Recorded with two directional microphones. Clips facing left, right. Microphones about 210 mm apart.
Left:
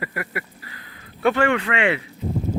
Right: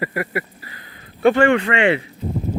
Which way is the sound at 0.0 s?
30° right (ahead or behind).